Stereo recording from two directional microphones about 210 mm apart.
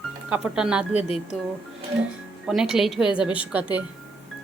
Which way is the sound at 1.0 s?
30° left (ahead or behind).